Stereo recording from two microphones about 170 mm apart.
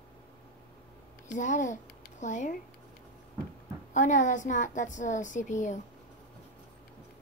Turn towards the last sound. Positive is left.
turn(degrees=45)  # may be behind; listen again after turning